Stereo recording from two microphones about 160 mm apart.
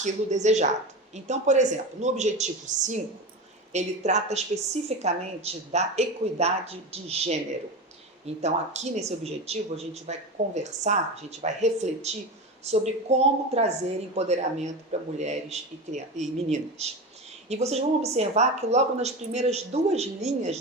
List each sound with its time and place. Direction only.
0.0 s speech: 45° right (ahead or behind)
8.4 s a woman's voice: 45° right (ahead or behind)